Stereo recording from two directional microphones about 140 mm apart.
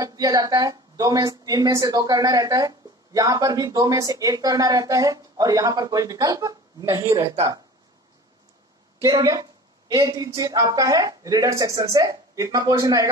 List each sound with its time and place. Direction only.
0.0 s a woman's voice: 25° right (ahead or behind)
9.0 s a woman's voice: 25° right (ahead or behind)